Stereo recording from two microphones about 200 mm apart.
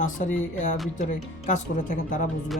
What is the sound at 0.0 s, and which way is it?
Speech, 40° left (ahead or behind).